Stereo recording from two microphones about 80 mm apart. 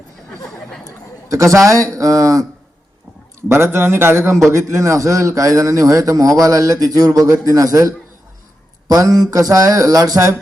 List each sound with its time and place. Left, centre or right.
0.3 s chatter: centre
1.3 s a man's voice: right
3.5 s a man's voice: right